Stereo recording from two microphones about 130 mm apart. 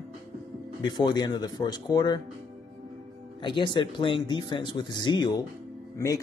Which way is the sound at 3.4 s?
40° left (ahead or behind).